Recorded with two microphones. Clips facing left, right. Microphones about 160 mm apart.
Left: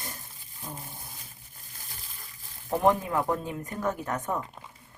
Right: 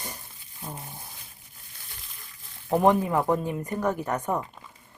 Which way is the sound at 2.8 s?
15° right (ahead or behind).